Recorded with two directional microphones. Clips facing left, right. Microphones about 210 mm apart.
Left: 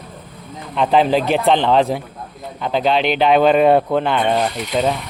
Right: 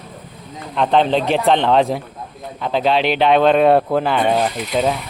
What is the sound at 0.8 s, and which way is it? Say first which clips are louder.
Speech: left 1 dB; 5° left (ahead or behind).